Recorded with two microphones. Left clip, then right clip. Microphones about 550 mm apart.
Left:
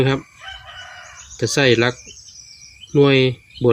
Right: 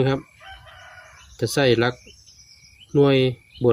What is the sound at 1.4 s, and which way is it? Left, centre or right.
Speech, right.